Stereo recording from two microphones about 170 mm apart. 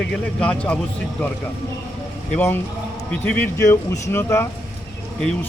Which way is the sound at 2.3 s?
10° left (ahead or behind).